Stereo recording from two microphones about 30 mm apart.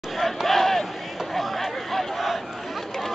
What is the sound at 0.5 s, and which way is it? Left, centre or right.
Crowd, centre.